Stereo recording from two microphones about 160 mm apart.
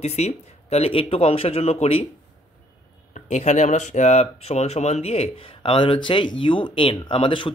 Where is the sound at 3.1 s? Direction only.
45° left (ahead or behind).